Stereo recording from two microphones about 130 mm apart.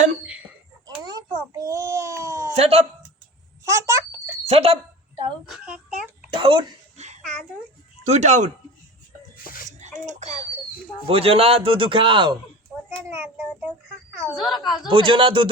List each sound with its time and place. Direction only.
1.0 s a sound: 30° right (ahead or behind)
2.6 s speech: 55° right (ahead or behind)
3.6 s a sound: 25° right (ahead or behind)
4.4 s a sound: 50° right (ahead or behind)
5.5 s cough: 5° right (ahead or behind)
6.3 s speech: 40° right (ahead or behind)
6.9 s babbling: 60° right (ahead or behind)
8.0 s speech: 60° right (ahead or behind)
9.4 s a sound: 90° left
10.1 s speech: 65° right (ahead or behind)
11.0 s speech: 50° right (ahead or behind)
13.1 s child singing: 20° right (ahead or behind)
14.3 s speech: centre (ahead or behind)
14.8 s speech: 40° right (ahead or behind)